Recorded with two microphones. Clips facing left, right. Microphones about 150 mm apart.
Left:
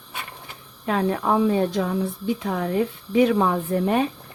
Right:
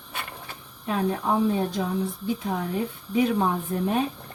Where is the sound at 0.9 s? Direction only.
90° left.